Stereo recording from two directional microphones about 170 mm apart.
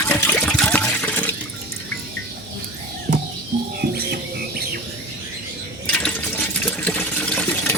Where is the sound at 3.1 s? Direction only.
45° right (ahead or behind).